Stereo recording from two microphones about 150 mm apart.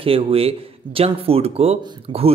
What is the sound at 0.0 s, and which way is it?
Speech, 40° right (ahead or behind).